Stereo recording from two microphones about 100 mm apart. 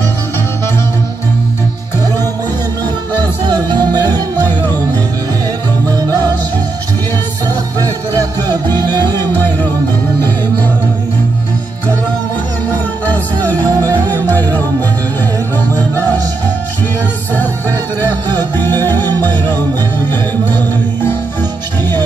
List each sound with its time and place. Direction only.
3.4 s music: 40° right (ahead or behind)
4.4 s music: 20° left (ahead or behind)
7.8 s music: 40° right (ahead or behind)
9.2 s music: 20° left (ahead or behind)
13.1 s music: 20° left (ahead or behind)
13.7 s music: 40° right (ahead or behind)
17.3 s music: 20° left (ahead or behind)